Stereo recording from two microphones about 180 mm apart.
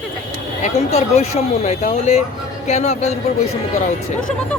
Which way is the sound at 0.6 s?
35° left (ahead or behind).